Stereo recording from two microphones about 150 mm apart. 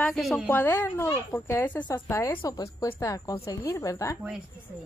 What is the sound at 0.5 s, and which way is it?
A woman's voice, 15° left (ahead or behind).